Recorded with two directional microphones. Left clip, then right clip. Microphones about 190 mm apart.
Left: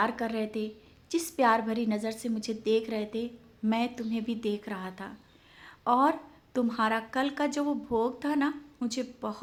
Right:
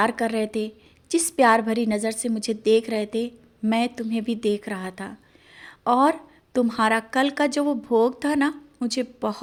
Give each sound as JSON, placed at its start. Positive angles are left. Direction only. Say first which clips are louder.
{"t": 0.0, "sound": "a woman's voice", "louder": "right 7 dB", "side_deg": -40}